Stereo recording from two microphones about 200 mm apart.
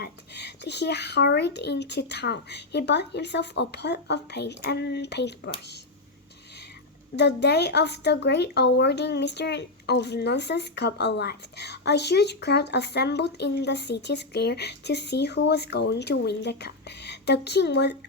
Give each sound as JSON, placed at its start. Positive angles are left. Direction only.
{"t": 0.0, "sound": "speech", "side_deg": 55}
{"t": 7.2, "sound": "speech", "side_deg": 55}